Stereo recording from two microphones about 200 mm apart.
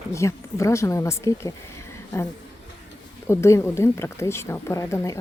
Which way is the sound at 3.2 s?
15° left (ahead or behind).